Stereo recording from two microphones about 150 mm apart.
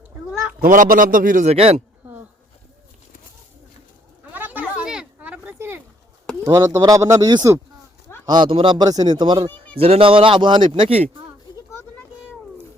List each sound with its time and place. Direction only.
0.6 s a man's voice: 65° right (ahead or behind)
1.5 s speech: 45° right (ahead or behind)
4.3 s a sound: 10° right (ahead or behind)
6.4 s speech: 20° right (ahead or behind)
8.3 s speech: 35° right (ahead or behind)
9.7 s speech: 40° right (ahead or behind)